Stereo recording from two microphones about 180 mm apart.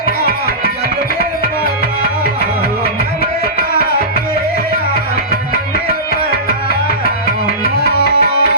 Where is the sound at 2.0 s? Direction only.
60° left (ahead or behind).